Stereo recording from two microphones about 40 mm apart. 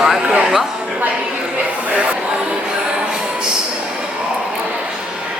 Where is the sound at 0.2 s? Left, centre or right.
Right.